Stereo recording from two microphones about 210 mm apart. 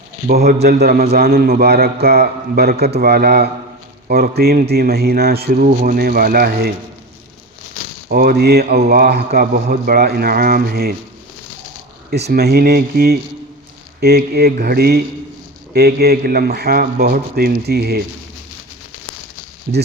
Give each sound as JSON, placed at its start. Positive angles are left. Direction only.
{"t": 0.3, "sound": "a man's voice", "side_deg": -50}
{"t": 8.1, "sound": "a man's voice", "side_deg": -45}
{"t": 12.1, "sound": "a man's voice", "side_deg": -50}
{"t": 19.7, "sound": "a man's voice", "side_deg": -45}